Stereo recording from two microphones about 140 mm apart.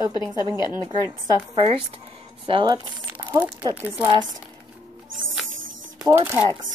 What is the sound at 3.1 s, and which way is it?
Crumpling, 15° right (ahead or behind).